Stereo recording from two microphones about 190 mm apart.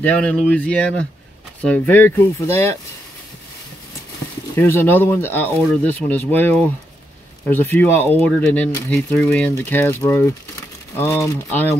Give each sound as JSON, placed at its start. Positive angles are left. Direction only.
{"t": 0.0, "sound": "speech", "side_deg": 5}
{"t": 4.6, "sound": "speech", "side_deg": 10}